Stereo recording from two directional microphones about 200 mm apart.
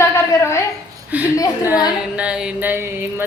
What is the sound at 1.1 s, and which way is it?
Speech, 10° right (ahead or behind).